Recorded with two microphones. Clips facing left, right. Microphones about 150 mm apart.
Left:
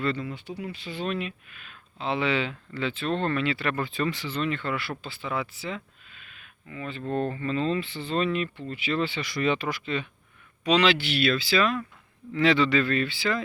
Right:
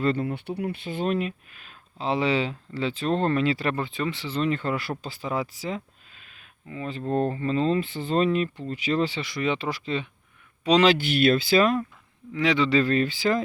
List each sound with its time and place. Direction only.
0.0 s speech: 50° right (ahead or behind)
3.8 s speech: 20° right (ahead or behind)
9.2 s speech: 20° right (ahead or behind)
9.6 s speech: 35° right (ahead or behind)
12.3 s speech: 15° right (ahead or behind)
12.7 s speech: 40° right (ahead or behind)